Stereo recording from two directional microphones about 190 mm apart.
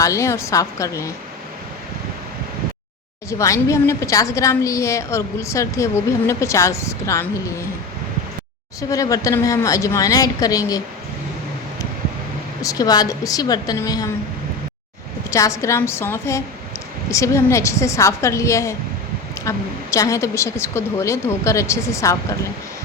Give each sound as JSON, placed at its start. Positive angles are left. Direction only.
{"t": 0.0, "sound": "a woman's voice", "side_deg": 15}
{"t": 3.2, "sound": "a woman's voice", "side_deg": 15}
{"t": 8.9, "sound": "a woman's voice", "side_deg": 15}
{"t": 12.6, "sound": "a woman's voice", "side_deg": 20}
{"t": 15.3, "sound": "a woman's voice", "side_deg": 15}